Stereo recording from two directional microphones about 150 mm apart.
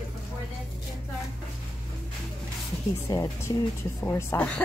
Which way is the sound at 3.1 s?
20° left (ahead or behind).